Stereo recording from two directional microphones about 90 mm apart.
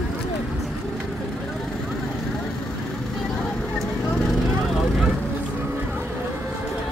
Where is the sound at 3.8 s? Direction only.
5° left (ahead or behind).